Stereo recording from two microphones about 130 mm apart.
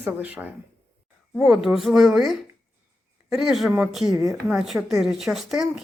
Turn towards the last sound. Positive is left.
turn(degrees=-5)  # may be behind; listen again after turning